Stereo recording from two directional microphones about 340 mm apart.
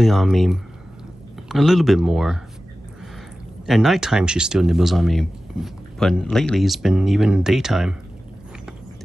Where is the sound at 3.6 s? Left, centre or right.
Centre.